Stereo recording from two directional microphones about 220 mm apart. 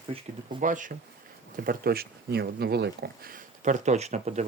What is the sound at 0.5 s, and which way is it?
Speech, 35° right (ahead or behind).